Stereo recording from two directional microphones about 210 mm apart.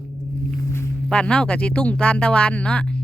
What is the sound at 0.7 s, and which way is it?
Speech, 10° left (ahead or behind).